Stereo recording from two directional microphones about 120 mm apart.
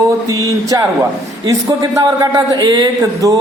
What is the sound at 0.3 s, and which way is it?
A man's voice, 25° right (ahead or behind).